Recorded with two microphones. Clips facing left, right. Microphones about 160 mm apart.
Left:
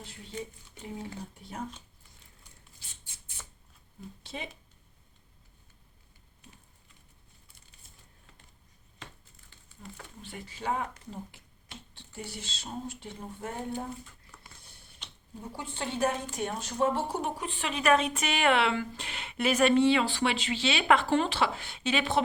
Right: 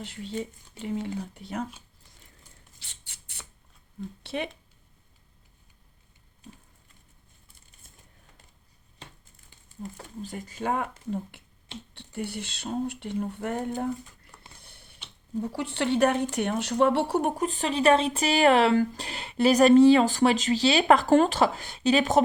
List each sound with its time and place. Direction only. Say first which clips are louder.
0.0 s speech: right 7 dB; 80° right
2.8 s squawk: right 1 dB; 70° right (ahead or behind)
4.2 s speech: right 9 dB; 65° right (ahead or behind)
10.0 s speech: right 5 dB; 40° right (ahead or behind)
11.9 s speech: right 8 dB; 60° right (ahead or behind)
14.6 s mechanisms: right 3 dB; 65° right (ahead or behind)
15.5 s a woman's voice: right 8 dB; 75° right (ahead or behind); by 22.2 s 40° right (ahead or behind)